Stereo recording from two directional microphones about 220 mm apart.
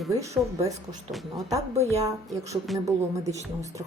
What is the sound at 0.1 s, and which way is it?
Speech, 15° right (ahead or behind).